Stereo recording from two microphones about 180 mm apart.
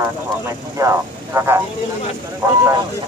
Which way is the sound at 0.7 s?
15° right (ahead or behind).